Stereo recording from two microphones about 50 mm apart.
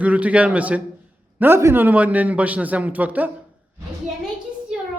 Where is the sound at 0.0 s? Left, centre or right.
Right.